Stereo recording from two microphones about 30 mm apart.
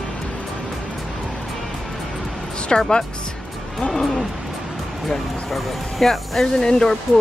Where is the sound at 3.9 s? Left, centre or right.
Centre.